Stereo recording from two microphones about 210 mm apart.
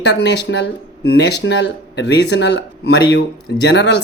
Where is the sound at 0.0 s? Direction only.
55° left (ahead or behind).